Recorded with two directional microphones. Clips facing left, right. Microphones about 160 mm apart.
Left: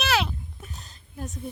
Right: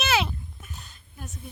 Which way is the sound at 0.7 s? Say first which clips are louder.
Left 5 dB; 35° left (ahead or behind).